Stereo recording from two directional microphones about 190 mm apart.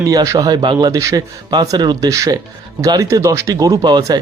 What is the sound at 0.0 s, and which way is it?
Speech, 20° right (ahead or behind).